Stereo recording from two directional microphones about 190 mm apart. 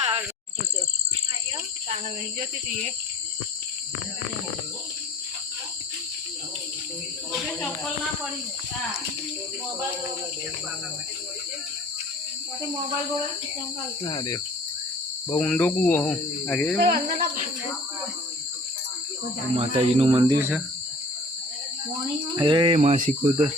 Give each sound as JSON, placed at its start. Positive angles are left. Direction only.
{"t": 14.0, "sound": "cricket", "side_deg": 20}
{"t": 15.3, "sound": "speech", "side_deg": 5}
{"t": 16.8, "sound": "speech", "side_deg": -55}
{"t": 19.5, "sound": "speech", "side_deg": -30}
{"t": 22.4, "sound": "speech", "side_deg": -25}